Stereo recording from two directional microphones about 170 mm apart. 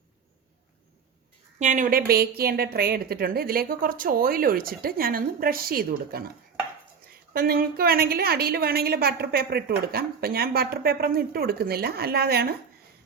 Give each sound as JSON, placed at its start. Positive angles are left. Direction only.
{"t": 1.5, "sound": "a woman's voice", "side_deg": -45}